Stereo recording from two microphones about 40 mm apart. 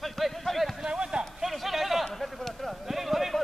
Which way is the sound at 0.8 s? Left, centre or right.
Right.